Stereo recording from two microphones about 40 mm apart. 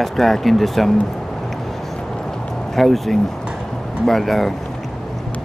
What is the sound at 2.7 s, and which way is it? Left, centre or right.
Speech, centre.